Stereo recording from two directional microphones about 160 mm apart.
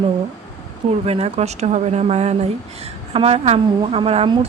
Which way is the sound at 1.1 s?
40° right (ahead or behind).